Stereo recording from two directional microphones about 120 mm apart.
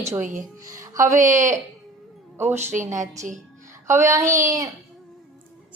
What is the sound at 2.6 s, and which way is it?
Speech, 75° right (ahead or behind).